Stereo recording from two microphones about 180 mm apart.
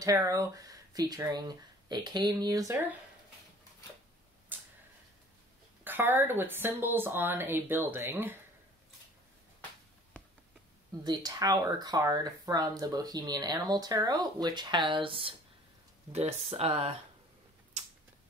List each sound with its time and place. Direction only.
0.0 s speech: 20° right (ahead or behind)
4.5 s a sound: 10° right (ahead or behind)
5.9 s a woman's voice: 10° right (ahead or behind)
11.1 s speech: 20° right (ahead or behind)